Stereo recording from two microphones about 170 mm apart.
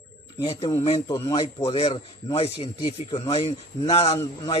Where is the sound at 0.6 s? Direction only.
35° left (ahead or behind).